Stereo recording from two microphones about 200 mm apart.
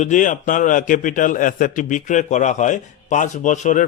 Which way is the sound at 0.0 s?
40° left (ahead or behind).